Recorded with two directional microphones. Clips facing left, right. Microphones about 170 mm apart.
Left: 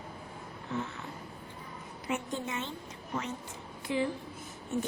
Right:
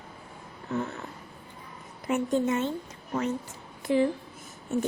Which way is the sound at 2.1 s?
45° right (ahead or behind).